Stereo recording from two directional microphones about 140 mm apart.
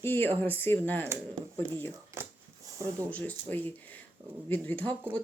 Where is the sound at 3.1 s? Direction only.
10° left (ahead or behind).